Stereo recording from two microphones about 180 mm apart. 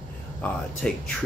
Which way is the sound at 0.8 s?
5° left (ahead or behind).